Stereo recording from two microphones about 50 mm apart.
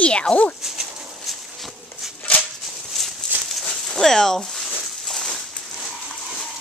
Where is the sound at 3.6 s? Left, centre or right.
Centre.